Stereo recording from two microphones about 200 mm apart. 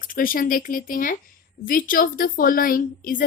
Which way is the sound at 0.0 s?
45° left (ahead or behind).